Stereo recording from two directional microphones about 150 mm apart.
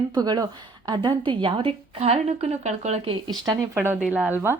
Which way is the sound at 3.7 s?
15° right (ahead or behind).